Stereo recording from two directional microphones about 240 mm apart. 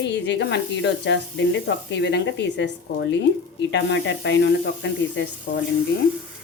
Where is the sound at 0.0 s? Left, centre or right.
Left.